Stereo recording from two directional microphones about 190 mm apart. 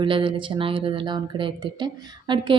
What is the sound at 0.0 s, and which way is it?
Speech, 25° right (ahead or behind).